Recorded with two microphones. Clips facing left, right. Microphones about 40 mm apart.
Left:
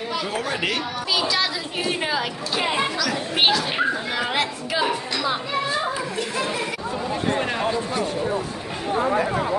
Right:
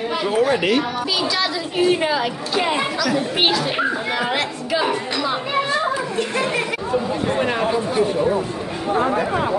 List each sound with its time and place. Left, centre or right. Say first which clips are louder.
0.3 s a woman's voice: right 10 dB; centre
7.3 s speech: right 4 dB; centre